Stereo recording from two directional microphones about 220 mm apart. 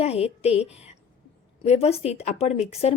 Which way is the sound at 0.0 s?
25° left (ahead or behind).